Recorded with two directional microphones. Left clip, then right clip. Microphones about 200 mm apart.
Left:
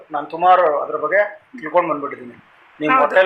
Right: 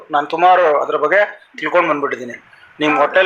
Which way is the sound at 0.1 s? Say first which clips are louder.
Right 2 dB; 55° right (ahead or behind).